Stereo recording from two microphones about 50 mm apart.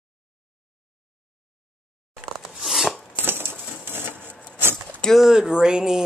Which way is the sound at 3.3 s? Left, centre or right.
Right.